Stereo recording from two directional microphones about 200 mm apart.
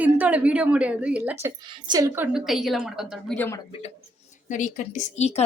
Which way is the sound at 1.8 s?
20° right (ahead or behind).